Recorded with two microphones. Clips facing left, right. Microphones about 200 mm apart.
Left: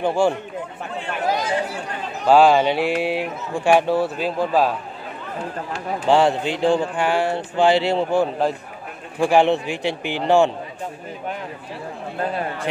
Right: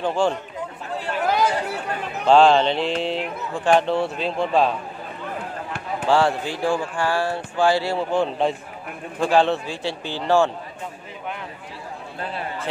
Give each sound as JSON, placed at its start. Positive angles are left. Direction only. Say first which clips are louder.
{"t": 0.0, "sound": "speech", "louder": "left 3 dB", "side_deg": 10}
{"t": 1.2, "sound": "a sound", "louder": "even", "side_deg": -60}
{"t": 2.2, "sound": "speech", "louder": "left 1 dB", "side_deg": 5}
{"t": 6.0, "sound": "speech", "louder": "left 3 dB", "side_deg": 20}
{"t": 8.2, "sound": "a man's voice", "louder": "left 1 dB", "side_deg": 5}
{"t": 9.2, "sound": "speech", "louder": "left 2 dB", "side_deg": 15}